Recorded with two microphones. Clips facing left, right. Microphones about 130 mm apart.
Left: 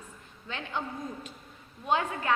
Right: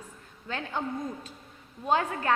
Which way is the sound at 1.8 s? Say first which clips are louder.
Right 2 dB; 35° right (ahead or behind).